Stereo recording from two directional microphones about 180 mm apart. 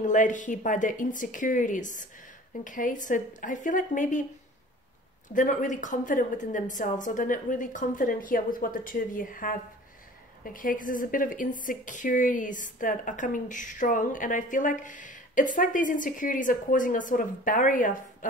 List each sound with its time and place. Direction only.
0.0 s speech: 45° left (ahead or behind)
5.3 s speech: 45° left (ahead or behind)